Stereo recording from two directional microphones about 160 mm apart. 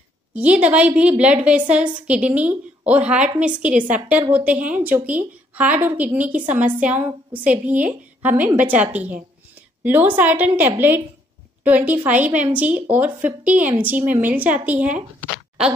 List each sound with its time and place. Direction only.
0.3 s a woman's voice: 10° right (ahead or behind)